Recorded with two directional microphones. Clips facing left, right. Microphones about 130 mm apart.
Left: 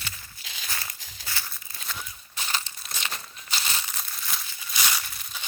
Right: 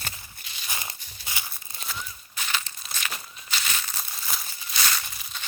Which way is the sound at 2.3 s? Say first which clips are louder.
Even; 35° left (ahead or behind).